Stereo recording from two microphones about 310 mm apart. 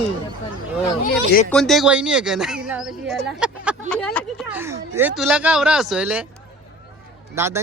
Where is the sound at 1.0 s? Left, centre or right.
Left.